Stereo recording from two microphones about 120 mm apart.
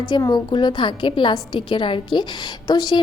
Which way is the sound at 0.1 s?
35° left (ahead or behind).